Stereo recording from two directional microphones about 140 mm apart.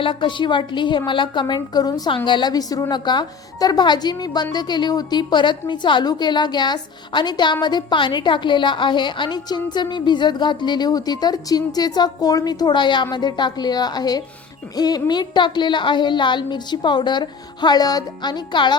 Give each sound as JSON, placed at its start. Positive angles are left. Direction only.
{"t": 0.0, "sound": "a woman's voice", "side_deg": 35}